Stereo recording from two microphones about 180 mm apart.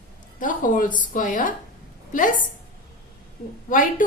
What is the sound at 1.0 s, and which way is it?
A woman's voice, 45° left (ahead or behind).